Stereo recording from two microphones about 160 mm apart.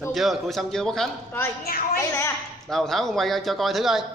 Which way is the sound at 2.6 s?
Centre (ahead or behind).